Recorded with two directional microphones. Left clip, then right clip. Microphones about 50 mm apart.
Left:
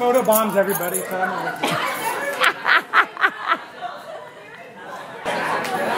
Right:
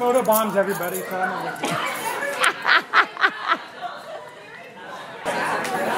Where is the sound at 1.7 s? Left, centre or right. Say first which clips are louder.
Left 2 dB; centre.